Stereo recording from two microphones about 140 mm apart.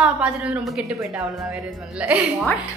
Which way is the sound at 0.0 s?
10° right (ahead or behind).